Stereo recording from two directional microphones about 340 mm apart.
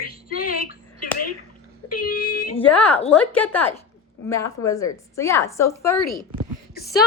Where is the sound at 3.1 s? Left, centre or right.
Centre.